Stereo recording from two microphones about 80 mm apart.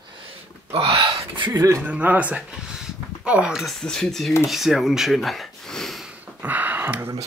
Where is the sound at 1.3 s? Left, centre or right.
Right.